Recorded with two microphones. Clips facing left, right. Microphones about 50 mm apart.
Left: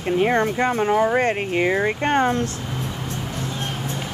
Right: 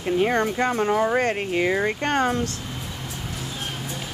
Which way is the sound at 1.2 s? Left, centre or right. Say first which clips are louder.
Left 2 dB; left.